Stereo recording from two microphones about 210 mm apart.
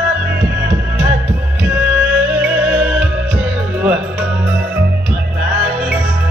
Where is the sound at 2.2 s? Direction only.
5° right (ahead or behind).